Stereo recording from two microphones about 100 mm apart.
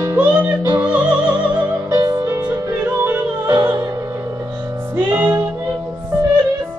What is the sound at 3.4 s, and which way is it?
Music, 40° right (ahead or behind).